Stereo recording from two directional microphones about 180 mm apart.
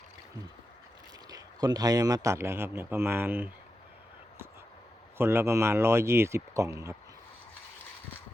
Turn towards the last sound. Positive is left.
turn(degrees=-15)  # may be behind; listen again after turning